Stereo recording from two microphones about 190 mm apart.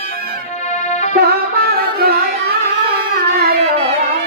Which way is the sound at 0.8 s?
35° left (ahead or behind).